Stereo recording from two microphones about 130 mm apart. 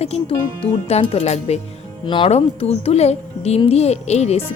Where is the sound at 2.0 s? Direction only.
40° left (ahead or behind).